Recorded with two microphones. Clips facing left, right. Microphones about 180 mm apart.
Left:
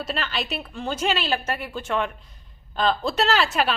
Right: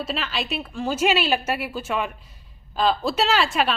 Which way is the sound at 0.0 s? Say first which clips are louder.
Right 1 dB; centre (ahead or behind).